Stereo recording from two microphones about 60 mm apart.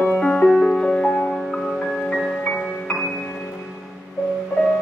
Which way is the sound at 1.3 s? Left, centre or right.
Centre.